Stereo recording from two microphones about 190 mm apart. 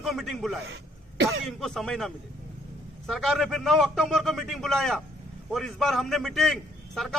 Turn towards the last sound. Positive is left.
turn(degrees=0)  # may be behind; listen again after turning